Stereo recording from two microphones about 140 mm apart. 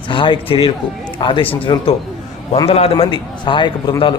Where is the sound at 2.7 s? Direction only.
45° left (ahead or behind).